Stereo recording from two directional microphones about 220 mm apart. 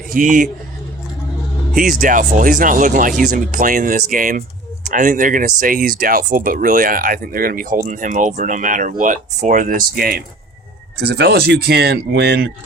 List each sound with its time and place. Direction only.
0.1 s speech: 35° right (ahead or behind)
1.7 s speech: 40° right (ahead or behind)